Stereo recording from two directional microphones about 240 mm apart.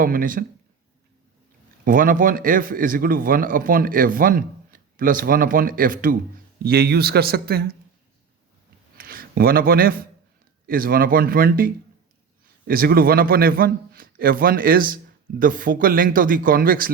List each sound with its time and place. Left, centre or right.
0.0 s speech: right
1.8 s speech: right
9.0 s a sound: right
10.7 s speech: right